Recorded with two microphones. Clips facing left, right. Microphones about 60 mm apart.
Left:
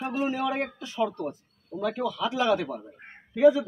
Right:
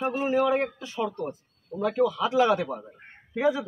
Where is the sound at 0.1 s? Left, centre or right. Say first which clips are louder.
Right 3 dB; right.